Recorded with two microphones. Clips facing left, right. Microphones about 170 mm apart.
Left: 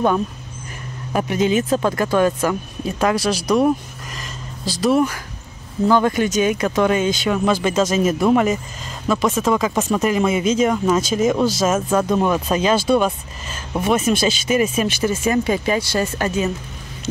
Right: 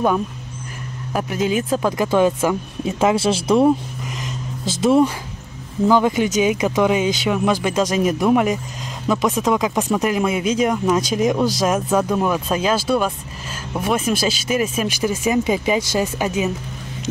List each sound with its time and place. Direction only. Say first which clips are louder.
1.1 s speech: left 2 dB; 5° right (ahead or behind)
2.0 s speech: right 1 dB; 15° right (ahead or behind)
4.2 s a sound: right 1 dB; 20° right (ahead or behind)
5.9 s speech: even; 15° right (ahead or behind)
11.9 s speech: left 1 dB; 5° right (ahead or behind)
14.0 s speech: left 2 dB; 5° right (ahead or behind)